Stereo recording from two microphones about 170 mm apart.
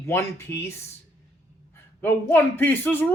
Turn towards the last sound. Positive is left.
turn(degrees=10)  # may be behind; listen again after turning